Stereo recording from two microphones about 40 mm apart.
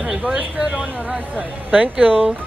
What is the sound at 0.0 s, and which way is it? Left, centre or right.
Speech, right.